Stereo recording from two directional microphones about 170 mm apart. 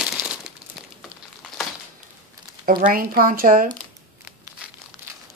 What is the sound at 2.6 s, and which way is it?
Speech, 55° right (ahead or behind).